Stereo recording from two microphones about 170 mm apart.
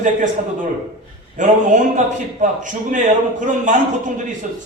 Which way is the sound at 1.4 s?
50° right (ahead or behind).